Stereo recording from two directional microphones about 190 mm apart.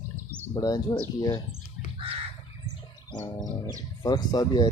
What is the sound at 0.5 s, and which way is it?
Speech, 20° left (ahead or behind).